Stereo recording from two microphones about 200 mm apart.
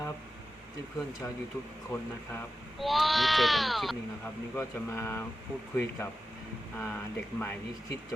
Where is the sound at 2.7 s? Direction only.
Centre (ahead or behind).